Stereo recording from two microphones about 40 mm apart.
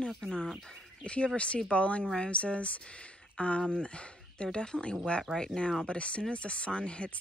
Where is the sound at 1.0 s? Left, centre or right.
Left.